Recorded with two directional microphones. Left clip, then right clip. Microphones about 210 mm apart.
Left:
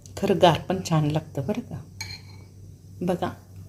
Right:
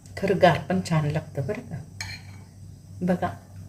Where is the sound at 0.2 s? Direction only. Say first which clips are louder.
Even; centre (ahead or behind).